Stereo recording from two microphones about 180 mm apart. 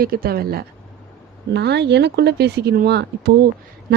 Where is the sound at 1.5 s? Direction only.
70° right (ahead or behind).